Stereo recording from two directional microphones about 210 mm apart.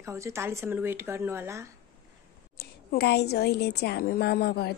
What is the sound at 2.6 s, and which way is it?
A woman's voice, 50° left (ahead or behind).